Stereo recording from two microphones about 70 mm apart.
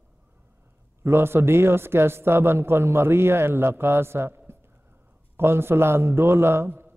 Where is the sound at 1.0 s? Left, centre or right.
Right.